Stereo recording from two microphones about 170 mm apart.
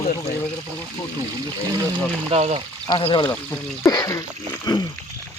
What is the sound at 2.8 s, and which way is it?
Speech, 30° left (ahead or behind).